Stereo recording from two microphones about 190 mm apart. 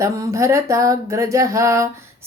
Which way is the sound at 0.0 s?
15° right (ahead or behind).